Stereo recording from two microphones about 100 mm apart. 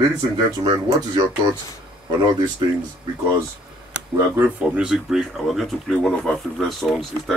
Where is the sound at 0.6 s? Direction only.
45° right (ahead or behind).